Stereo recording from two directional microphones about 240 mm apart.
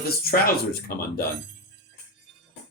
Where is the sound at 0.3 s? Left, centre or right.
Left.